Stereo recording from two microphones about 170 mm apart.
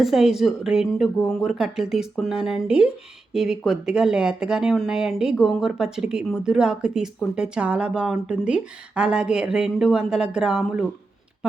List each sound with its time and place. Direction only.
0.0 s speech: centre (ahead or behind)